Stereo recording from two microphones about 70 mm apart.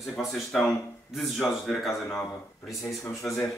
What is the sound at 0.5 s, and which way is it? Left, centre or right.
Speech, centre.